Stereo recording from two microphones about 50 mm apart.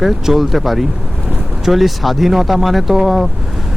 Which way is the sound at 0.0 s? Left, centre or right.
Centre.